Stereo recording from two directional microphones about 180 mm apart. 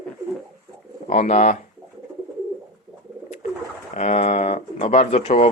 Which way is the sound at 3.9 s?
40° left (ahead or behind).